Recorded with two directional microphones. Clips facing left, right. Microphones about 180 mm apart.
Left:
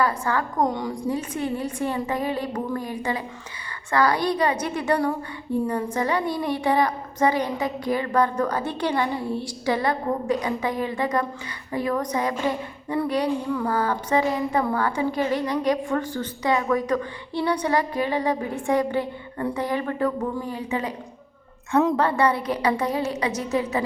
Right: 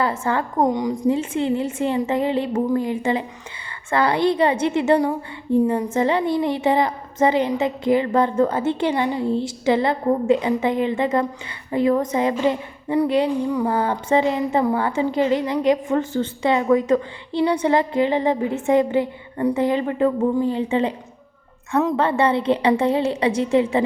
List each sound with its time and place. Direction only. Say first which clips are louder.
0.0 s a woman's voice: right 2 dB; 25° right (ahead or behind)
21.7 s a woman's voice: even; centre (ahead or behind)
22.0 s a woman's voice: right 3 dB; 25° right (ahead or behind)